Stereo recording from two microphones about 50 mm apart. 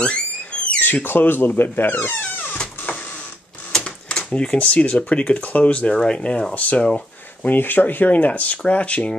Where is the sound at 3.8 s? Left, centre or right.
Left.